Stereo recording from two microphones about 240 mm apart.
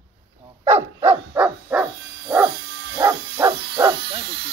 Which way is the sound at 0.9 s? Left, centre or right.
Right.